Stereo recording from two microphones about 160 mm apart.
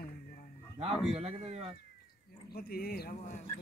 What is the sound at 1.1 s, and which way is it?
Speech, 40° right (ahead or behind).